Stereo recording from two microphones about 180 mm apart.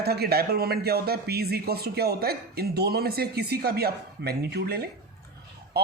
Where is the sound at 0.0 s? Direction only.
60° right (ahead or behind).